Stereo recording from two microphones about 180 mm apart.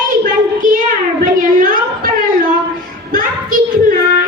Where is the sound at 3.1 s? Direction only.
50° right (ahead or behind).